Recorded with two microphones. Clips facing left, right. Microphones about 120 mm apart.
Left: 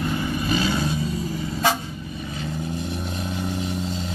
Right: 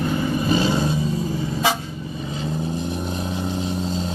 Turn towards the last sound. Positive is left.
turn(degrees=-35)  # may be behind; listen again after turning